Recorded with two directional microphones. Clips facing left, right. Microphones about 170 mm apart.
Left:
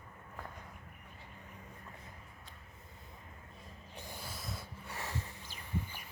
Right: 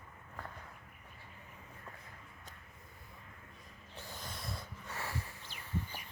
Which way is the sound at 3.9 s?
10° left (ahead or behind).